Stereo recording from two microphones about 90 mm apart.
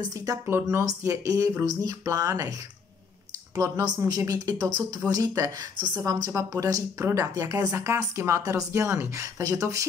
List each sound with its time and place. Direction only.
0.1 s speech: 40° right (ahead or behind)
4.6 s speech: 50° right (ahead or behind)
5.1 s speech: 35° right (ahead or behind)